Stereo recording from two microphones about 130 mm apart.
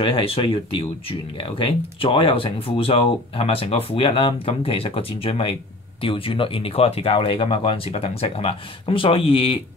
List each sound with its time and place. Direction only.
0.0 s speech: 45° left (ahead or behind)